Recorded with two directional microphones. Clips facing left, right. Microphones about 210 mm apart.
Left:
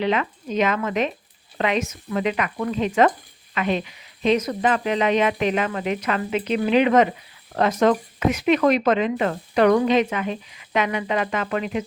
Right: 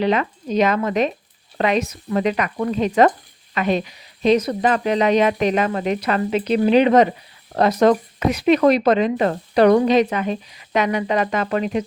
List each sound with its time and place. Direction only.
0.0 s speech: 40° right (ahead or behind)